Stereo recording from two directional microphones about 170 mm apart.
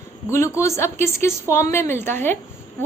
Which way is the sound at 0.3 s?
15° left (ahead or behind).